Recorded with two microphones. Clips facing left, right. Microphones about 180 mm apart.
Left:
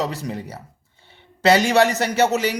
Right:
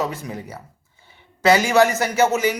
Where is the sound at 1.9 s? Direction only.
65° left (ahead or behind).